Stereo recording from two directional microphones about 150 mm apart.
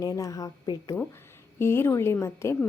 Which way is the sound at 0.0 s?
25° left (ahead or behind).